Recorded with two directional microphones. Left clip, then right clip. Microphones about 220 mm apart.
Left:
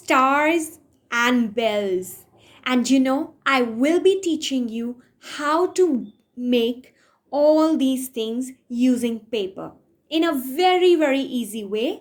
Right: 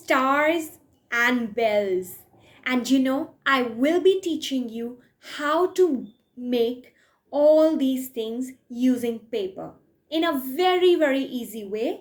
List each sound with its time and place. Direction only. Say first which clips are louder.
0.0 s a woman's voice: left 3 dB; 35° left (ahead or behind)